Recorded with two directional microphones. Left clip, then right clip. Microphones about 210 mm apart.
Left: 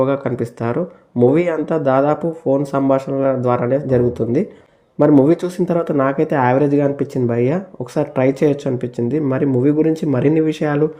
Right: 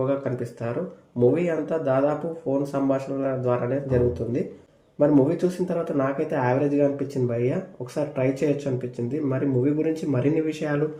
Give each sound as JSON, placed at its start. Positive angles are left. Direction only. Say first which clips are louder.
{"t": 0.0, "sound": "speech", "louder": "left 8 dB", "side_deg": 35}